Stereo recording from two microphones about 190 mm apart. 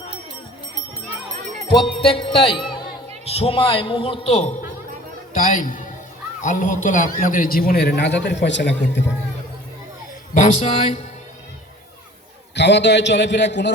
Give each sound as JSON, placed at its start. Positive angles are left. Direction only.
{"t": 2.0, "sound": "a man's voice", "side_deg": 30}
{"t": 5.3, "sound": "a man's voice", "side_deg": 45}
{"t": 10.3, "sound": "a man's voice", "side_deg": 40}
{"t": 12.5, "sound": "a man's voice", "side_deg": 65}